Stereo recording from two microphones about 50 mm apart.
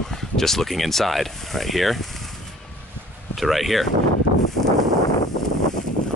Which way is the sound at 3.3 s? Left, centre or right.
Centre.